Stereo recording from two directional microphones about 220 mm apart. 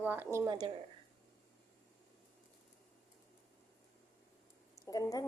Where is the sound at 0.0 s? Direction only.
10° right (ahead or behind).